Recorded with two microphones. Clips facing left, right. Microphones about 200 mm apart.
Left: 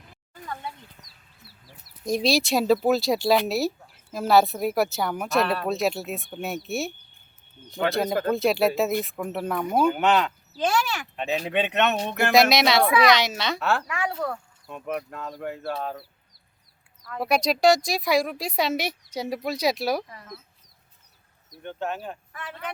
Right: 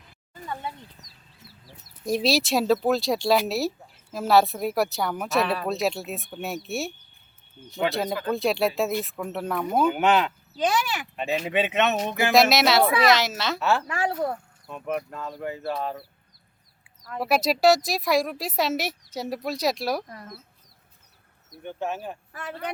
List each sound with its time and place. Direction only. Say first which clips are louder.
2.0 s speech: even; 5° right (ahead or behind)
10.6 s speech: even; 15° right (ahead or behind)
11.4 s speech: even; 5° right (ahead or behind)
13.8 s speech: right 2 dB; 30° right (ahead or behind)
14.7 s speech: right 1 dB; centre (ahead or behind)
17.2 s speech: even; 5° right (ahead or behind)
21.6 s speech: even; 10° right (ahead or behind)
22.4 s speech: right 3 dB; 40° right (ahead or behind)